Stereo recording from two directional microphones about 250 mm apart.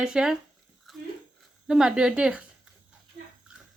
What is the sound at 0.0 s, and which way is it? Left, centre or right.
Speech, centre.